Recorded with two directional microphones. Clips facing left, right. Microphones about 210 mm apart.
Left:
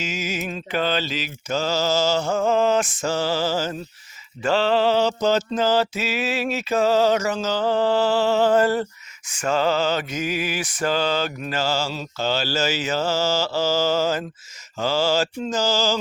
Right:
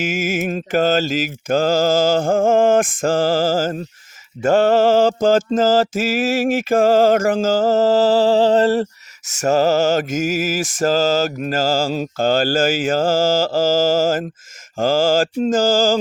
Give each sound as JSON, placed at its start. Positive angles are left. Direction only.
{"t": 0.0, "sound": "mantra", "side_deg": -50}